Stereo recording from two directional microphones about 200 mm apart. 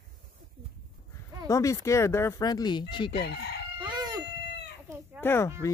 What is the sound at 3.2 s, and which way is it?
Chicken, 55° left (ahead or behind).